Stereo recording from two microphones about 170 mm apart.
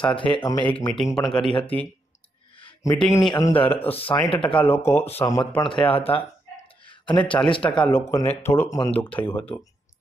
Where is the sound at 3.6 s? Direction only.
35° left (ahead or behind).